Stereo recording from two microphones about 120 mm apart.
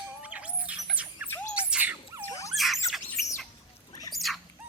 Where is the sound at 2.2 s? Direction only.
25° left (ahead or behind).